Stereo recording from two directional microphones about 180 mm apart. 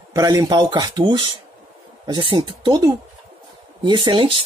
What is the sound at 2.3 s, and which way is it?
Speech, 25° right (ahead or behind).